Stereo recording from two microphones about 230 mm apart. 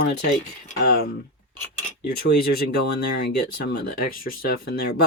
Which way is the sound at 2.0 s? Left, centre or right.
Left.